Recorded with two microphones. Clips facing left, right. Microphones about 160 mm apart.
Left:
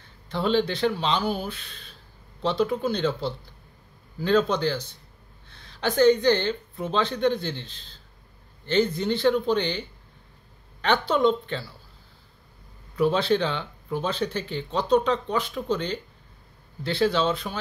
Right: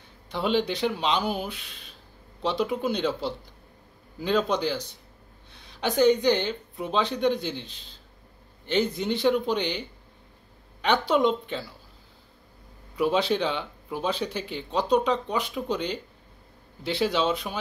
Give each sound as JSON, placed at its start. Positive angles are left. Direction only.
{"t": 0.3, "sound": "speech", "side_deg": -15}
{"t": 5.5, "sound": "a sound", "side_deg": -15}
{"t": 6.2, "sound": "speech", "side_deg": -15}
{"t": 12.9, "sound": "speech", "side_deg": -15}